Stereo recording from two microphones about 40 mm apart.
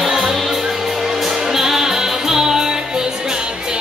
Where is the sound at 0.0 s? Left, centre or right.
Centre.